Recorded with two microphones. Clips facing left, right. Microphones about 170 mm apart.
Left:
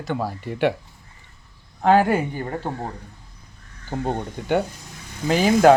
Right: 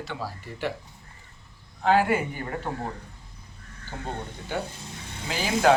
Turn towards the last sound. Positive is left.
turn(degrees=50)  # may be behind; listen again after turning